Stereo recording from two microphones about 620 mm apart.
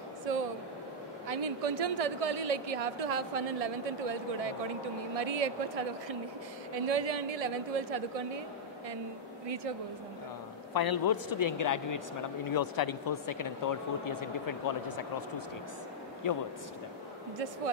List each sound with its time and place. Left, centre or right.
0.2 s a sound: right
1.2 s a woman's voice: right
10.7 s speech: left